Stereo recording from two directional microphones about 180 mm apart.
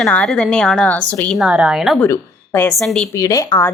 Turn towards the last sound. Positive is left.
turn(degrees=15)  # may be behind; listen again after turning